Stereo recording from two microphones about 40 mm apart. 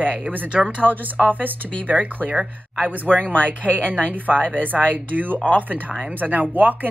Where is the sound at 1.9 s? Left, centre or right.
Centre.